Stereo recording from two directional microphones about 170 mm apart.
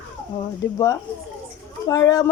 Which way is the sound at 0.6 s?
15° left (ahead or behind).